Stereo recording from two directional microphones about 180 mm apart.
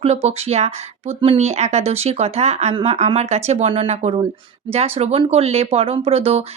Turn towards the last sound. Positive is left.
turn(degrees=-35)  # may be behind; listen again after turning